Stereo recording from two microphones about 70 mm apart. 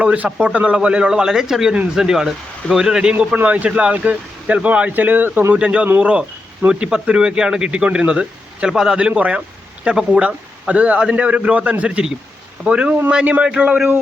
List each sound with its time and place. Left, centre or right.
0.0 s a man's voice: centre